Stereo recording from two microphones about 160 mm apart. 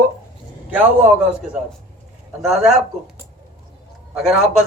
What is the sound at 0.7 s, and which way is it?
A man's voice, 10° right (ahead or behind).